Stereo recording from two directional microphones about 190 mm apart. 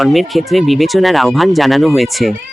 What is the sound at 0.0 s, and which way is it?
Speech, centre (ahead or behind).